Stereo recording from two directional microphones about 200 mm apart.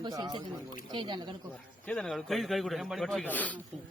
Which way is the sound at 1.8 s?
5° left (ahead or behind).